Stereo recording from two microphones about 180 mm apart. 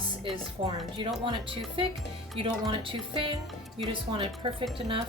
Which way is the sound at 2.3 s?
30° right (ahead or behind).